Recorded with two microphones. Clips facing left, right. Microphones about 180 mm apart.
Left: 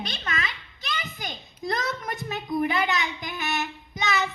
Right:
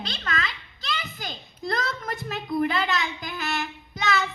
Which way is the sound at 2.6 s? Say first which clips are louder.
Even; 20° left (ahead or behind).